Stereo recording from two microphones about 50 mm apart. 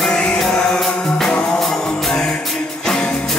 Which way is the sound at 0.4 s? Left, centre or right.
Centre.